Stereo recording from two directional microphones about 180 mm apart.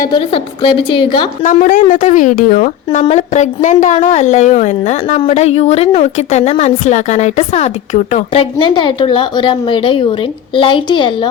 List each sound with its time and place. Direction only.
0.0 s a woman's voice: 30° left (ahead or behind)
1.4 s a woman's voice: 45° left (ahead or behind); by 11.3 s 25° left (ahead or behind)